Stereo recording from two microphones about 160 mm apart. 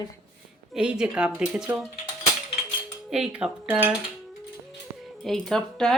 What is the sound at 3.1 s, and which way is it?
Speech, 5° right (ahead or behind).